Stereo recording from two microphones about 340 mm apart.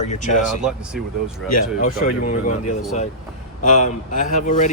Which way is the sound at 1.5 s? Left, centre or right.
Left.